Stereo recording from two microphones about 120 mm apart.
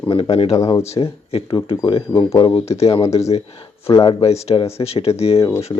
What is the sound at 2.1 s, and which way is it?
Speech, 35° left (ahead or behind).